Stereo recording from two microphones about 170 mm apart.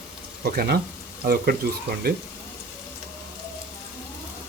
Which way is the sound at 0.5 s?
65° right (ahead or behind).